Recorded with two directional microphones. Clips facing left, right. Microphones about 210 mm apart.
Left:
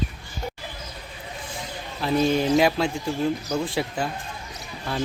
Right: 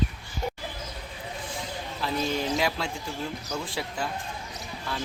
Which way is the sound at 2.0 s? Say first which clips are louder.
Left 8 dB; 55° left (ahead or behind).